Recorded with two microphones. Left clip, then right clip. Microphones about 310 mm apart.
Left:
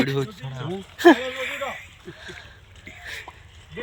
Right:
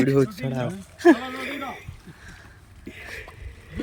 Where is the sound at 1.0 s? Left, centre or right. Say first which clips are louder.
Left 2 dB; centre.